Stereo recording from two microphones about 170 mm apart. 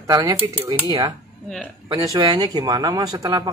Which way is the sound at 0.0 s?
20° right (ahead or behind).